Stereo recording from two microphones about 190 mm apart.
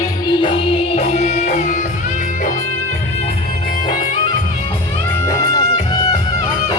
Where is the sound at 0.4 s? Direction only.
30° left (ahead or behind).